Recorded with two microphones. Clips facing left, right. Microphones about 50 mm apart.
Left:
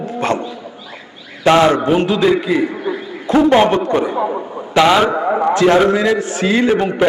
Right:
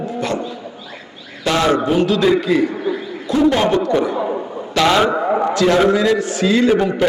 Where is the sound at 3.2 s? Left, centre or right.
Left.